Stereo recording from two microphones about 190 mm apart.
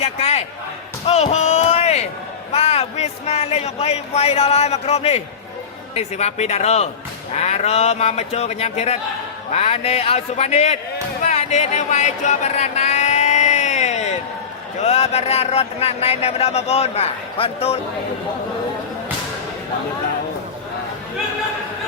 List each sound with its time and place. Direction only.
0.0 s speech: 35° left (ahead or behind)
11.2 s a sound: 35° left (ahead or behind)
14.8 s speech: 35° left (ahead or behind)